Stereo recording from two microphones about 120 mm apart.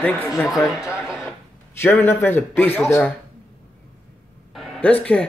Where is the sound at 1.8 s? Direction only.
20° left (ahead or behind).